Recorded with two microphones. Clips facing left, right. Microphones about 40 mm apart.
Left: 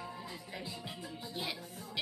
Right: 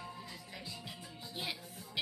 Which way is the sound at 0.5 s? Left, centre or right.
Centre.